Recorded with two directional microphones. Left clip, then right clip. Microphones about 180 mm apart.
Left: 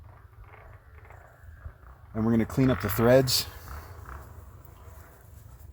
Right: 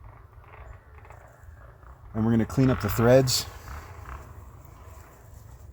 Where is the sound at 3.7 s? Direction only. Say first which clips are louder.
Right 2 dB; 50° right (ahead or behind).